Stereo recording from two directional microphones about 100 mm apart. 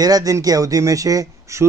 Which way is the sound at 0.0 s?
40° right (ahead or behind).